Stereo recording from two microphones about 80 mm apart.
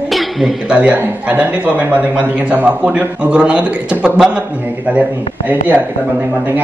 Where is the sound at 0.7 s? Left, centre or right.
Centre.